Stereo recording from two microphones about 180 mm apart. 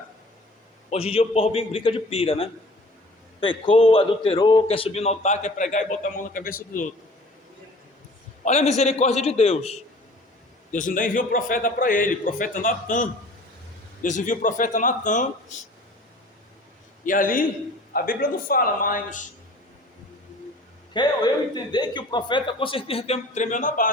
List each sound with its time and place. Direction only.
1.1 s a man's voice: 35° left (ahead or behind)
8.4 s a man's voice: 40° left (ahead or behind)
10.7 s a man's voice: 45° left (ahead or behind)
17.1 s a man's voice: 50° left (ahead or behind)
20.9 s a man's voice: 25° left (ahead or behind); by 23.9 s 50° left (ahead or behind)